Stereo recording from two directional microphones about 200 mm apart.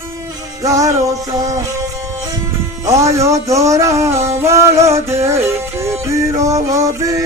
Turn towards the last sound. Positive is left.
turn(degrees=-15)  # may be behind; listen again after turning